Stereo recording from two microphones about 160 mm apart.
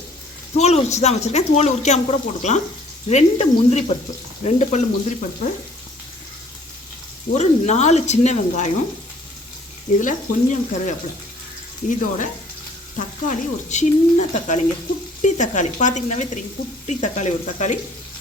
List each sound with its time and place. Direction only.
0.5 s speech: 45° left (ahead or behind)
7.3 s speech: 45° left (ahead or behind)
10.0 s speech: 55° left (ahead or behind)